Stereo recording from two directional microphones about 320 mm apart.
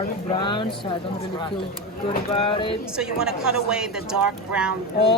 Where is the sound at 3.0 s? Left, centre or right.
Centre.